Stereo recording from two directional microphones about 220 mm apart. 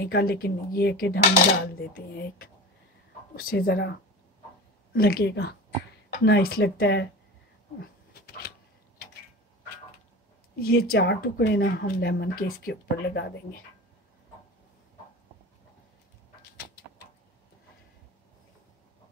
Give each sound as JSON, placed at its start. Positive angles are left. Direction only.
{"t": 0.0, "sound": "speech", "side_deg": 45}
{"t": 3.3, "sound": "speech", "side_deg": 40}
{"t": 7.8, "sound": "a sound", "side_deg": 45}
{"t": 10.6, "sound": "speech", "side_deg": 45}